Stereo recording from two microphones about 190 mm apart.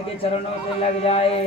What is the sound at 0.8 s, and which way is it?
Speech, 30° left (ahead or behind).